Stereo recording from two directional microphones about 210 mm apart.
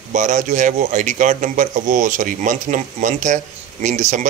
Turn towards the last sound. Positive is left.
turn(degrees=-35)  # may be behind; listen again after turning